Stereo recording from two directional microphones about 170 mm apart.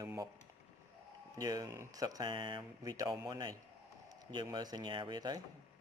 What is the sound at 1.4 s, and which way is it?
A man's voice, 20° right (ahead or behind).